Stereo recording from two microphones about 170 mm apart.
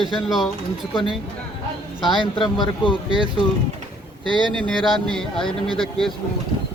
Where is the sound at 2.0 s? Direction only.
25° left (ahead or behind).